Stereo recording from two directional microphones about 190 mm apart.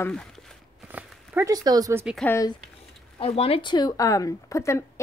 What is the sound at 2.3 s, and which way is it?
Speech, 20° left (ahead or behind).